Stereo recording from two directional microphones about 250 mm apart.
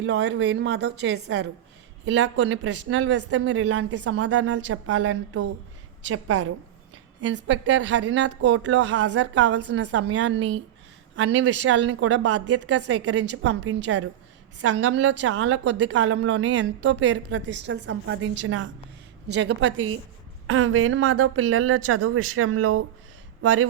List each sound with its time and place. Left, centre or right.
0.0 s speech: right
4.2 s a woman's voice: right
7.2 s speech: right
7.8 s a woman's voice: right
8.1 s a woman's voice: right